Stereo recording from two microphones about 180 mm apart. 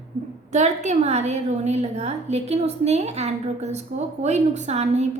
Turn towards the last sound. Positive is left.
turn(degrees=-35)  # may be behind; listen again after turning